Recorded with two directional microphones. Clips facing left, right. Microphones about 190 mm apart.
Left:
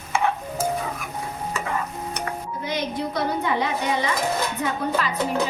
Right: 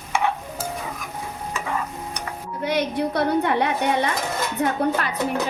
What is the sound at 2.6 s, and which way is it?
A woman's voice, 65° right (ahead or behind).